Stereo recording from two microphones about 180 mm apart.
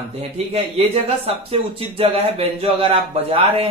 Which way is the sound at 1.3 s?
35° right (ahead or behind).